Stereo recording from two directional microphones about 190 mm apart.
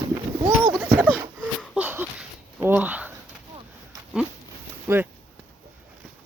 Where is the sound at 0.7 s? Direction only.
5° right (ahead or behind).